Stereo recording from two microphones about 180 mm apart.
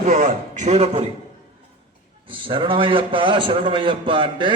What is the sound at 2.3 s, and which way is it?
A man's voice, 30° right (ahead or behind).